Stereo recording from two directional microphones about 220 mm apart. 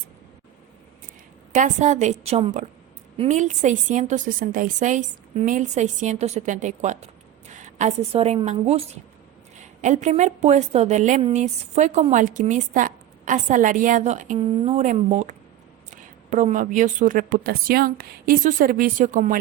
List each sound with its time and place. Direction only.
1.5 s a woman's voice: 35° right (ahead or behind)